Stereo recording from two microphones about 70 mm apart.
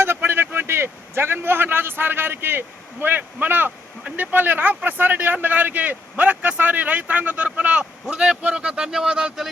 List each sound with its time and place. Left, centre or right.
0.0 s a man's voice: right; by 9.5 s centre